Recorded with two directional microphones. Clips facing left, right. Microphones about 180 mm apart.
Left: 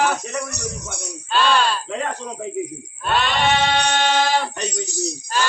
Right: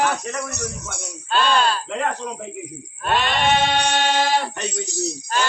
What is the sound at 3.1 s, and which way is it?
Sheep, 50° right (ahead or behind).